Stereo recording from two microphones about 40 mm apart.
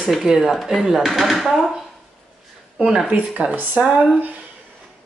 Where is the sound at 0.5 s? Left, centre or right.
Centre.